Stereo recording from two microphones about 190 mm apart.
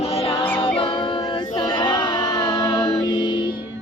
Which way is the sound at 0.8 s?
25° left (ahead or behind).